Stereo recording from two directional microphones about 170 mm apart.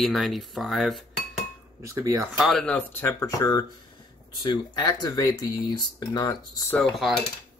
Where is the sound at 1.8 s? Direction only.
15° right (ahead or behind).